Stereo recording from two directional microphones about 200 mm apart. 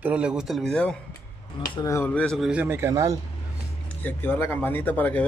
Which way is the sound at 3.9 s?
10° left (ahead or behind).